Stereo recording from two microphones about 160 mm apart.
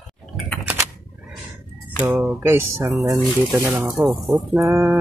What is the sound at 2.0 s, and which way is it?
Speech, 10° right (ahead or behind).